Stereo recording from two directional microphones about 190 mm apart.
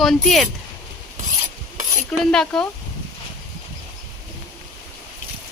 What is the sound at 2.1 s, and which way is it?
Speech, 5° left (ahead or behind).